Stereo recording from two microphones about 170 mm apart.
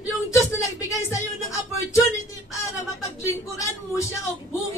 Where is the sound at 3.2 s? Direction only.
20° left (ahead or behind).